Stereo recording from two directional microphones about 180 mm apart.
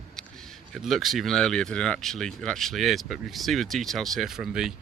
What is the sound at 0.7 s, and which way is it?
Speech, centre (ahead or behind).